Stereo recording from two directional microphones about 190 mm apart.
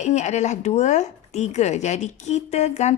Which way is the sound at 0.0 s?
40° left (ahead or behind).